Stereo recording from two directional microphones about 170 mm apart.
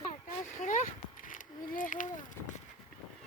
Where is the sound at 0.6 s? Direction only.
50° left (ahead or behind).